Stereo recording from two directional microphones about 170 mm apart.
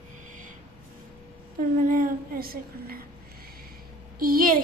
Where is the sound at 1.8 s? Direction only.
55° right (ahead or behind).